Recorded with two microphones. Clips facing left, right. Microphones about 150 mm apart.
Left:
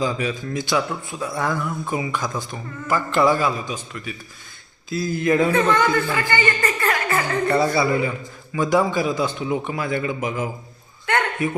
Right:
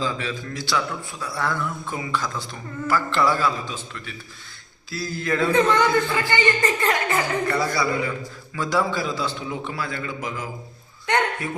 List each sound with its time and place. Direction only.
0.0 s a man's voice: 15° left (ahead or behind)
5.7 s a man's voice: 20° right (ahead or behind)
6.3 s music: 20° right (ahead or behind)
7.4 s a man's voice: 25° left (ahead or behind)